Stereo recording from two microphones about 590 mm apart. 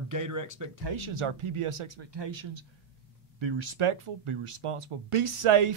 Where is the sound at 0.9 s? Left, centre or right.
Right.